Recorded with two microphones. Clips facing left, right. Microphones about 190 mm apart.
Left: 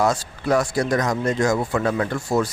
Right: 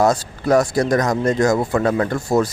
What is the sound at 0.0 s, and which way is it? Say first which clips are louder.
A man's voice: right 4 dB; 40° right (ahead or behind).